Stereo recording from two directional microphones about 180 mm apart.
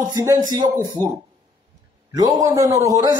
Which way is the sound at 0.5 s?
25° right (ahead or behind).